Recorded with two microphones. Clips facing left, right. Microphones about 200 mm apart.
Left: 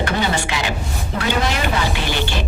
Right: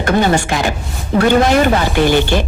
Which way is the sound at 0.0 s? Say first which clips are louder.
Right 7 dB; 50° right (ahead or behind).